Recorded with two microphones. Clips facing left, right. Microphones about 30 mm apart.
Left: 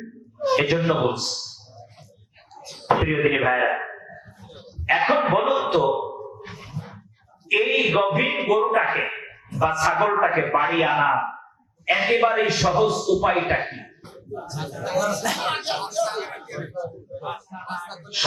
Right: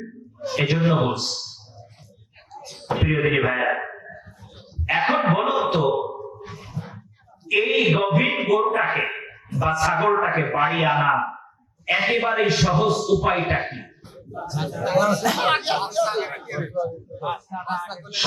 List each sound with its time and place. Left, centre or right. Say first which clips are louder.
0.6 s a man's voice: right 5 dB; centre
3.0 s a man's voice: right 4 dB; centre
3.6 s a sound: even; centre
6.4 s a sound: right 1 dB; left
7.4 s mantra: right 1 dB; centre
8.4 s a man's voice: even; centre
14.4 s speech: right 6 dB; centre